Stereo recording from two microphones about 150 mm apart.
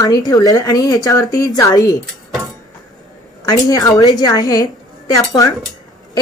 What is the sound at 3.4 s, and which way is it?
A woman's voice, 25° left (ahead or behind).